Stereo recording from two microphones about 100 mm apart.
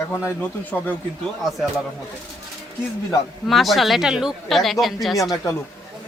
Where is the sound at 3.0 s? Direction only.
Centre (ahead or behind).